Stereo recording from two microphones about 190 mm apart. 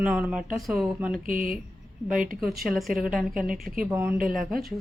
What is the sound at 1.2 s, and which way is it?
Speech, 45° right (ahead or behind).